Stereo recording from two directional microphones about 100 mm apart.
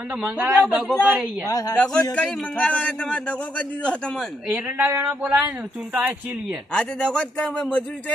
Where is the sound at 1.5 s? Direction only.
35° left (ahead or behind).